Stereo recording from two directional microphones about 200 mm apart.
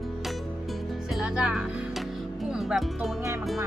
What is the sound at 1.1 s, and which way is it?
Speech, centre (ahead or behind).